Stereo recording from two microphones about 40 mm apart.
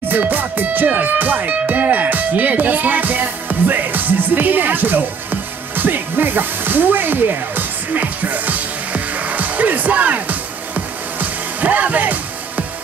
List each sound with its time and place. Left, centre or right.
0.1 s music: right